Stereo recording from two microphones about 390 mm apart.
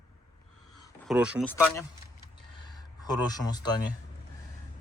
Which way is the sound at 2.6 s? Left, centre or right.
Centre.